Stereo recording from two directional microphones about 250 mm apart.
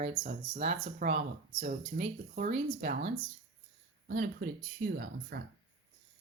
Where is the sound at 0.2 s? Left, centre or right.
Right.